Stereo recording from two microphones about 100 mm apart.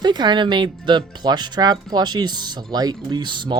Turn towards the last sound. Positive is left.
turn(degrees=-50)  # may be behind; listen again after turning